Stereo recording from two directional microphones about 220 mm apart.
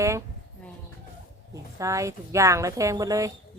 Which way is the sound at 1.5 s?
15° right (ahead or behind).